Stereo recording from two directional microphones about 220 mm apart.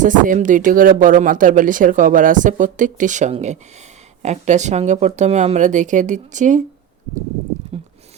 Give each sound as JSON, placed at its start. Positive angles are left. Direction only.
{"t": 0.0, "sound": "speech", "side_deg": -35}